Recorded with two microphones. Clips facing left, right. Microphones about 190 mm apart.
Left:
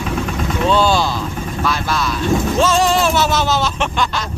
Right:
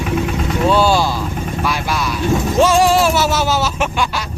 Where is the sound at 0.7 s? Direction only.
10° right (ahead or behind).